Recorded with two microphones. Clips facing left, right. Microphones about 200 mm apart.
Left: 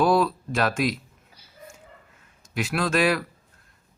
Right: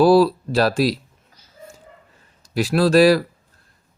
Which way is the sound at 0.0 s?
35° right (ahead or behind).